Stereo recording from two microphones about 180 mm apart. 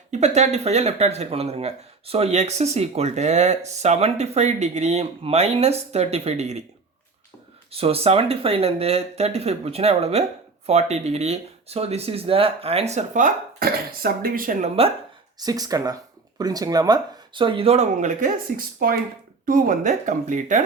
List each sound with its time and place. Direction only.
0.1 s speech: 40° right (ahead or behind)
7.7 s speech: 35° right (ahead or behind); by 14.7 s 50° right (ahead or behind)
15.4 s speech: 20° right (ahead or behind); by 20.7 s 45° right (ahead or behind)